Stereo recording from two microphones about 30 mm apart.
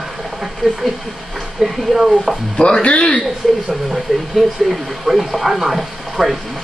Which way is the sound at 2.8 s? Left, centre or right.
Left.